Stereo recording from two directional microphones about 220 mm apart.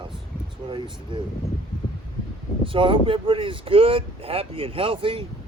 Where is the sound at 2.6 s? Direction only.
25° right (ahead or behind).